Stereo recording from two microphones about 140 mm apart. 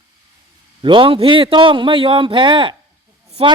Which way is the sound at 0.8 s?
35° right (ahead or behind).